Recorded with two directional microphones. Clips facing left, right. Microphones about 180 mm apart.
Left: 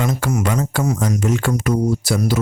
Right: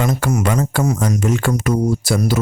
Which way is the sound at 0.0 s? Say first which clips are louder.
Right 2 dB; 45° right (ahead or behind).